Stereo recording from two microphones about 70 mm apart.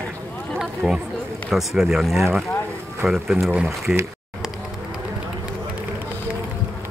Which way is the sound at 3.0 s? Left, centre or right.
Centre.